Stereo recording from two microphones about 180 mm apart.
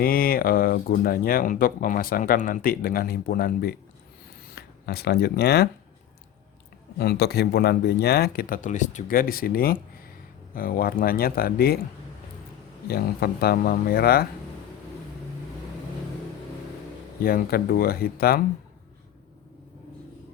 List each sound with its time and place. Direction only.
0.0 s speech: 55° left (ahead or behind)
7.0 s speech: 60° left (ahead or behind)
12.9 s speech: 60° left (ahead or behind)
17.2 s speech: 55° left (ahead or behind)